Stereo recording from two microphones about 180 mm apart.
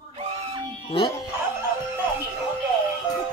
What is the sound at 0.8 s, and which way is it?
Speech, 30° left (ahead or behind).